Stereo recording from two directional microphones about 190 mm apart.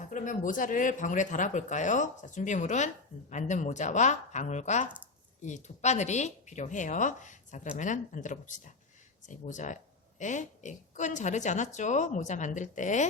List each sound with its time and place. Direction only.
0.1 s speech: 45° left (ahead or behind)